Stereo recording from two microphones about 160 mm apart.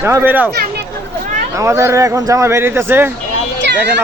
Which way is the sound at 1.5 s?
15° right (ahead or behind).